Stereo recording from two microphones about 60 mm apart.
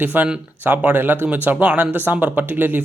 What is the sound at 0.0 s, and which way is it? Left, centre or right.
Speech, right.